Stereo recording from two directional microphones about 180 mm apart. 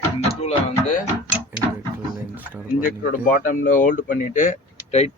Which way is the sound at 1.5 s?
10° right (ahead or behind).